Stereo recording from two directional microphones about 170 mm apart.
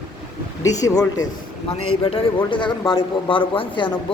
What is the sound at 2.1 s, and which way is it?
Speech, 30° left (ahead or behind).